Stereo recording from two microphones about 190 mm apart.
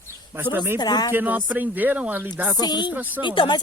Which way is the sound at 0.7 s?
20° left (ahead or behind).